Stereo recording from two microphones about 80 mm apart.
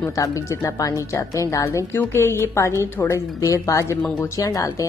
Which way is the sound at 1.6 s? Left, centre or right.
Left.